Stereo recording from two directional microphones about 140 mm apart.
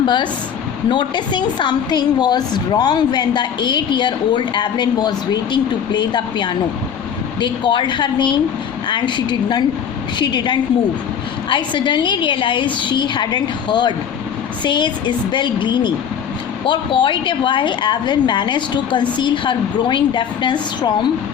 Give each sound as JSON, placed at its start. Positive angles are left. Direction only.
{"t": 0.0, "sound": "a woman's voice", "side_deg": 35}